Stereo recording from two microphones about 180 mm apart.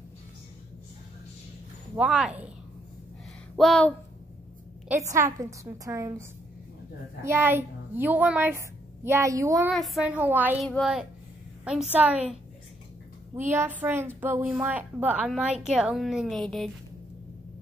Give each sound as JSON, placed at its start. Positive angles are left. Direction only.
{"t": 2.0, "sound": "speech", "side_deg": -5}
{"t": 3.5, "sound": "a woman's voice", "side_deg": 5}
{"t": 5.1, "sound": "a woman's voice", "side_deg": -15}
{"t": 7.2, "sound": "a woman's voice", "side_deg": -10}
{"t": 9.7, "sound": "a woman's voice", "side_deg": 0}
{"t": 10.6, "sound": "a woman's voice", "side_deg": 0}
{"t": 13.5, "sound": "a woman's voice", "side_deg": -10}